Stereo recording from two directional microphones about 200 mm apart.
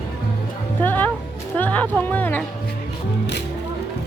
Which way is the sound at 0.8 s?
10° left (ahead or behind).